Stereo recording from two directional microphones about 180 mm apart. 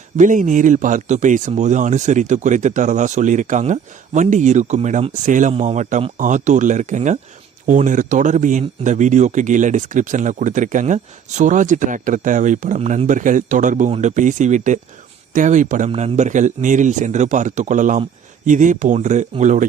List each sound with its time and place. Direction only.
0.2 s speech: 45° right (ahead or behind)